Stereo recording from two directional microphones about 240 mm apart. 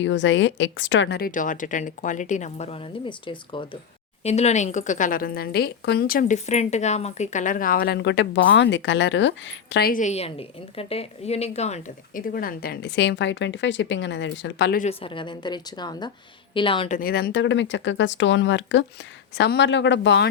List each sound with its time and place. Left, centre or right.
0.0 s a woman's voice: left
14.8 s a woman's voice: left
17.0 s speech: left